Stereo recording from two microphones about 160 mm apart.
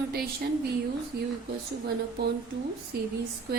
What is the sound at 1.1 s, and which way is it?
Speech, 90° right.